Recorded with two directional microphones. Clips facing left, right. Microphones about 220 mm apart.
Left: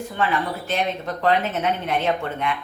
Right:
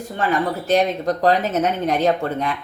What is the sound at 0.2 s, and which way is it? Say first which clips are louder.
Speech: right 3 dB; 40° right (ahead or behind).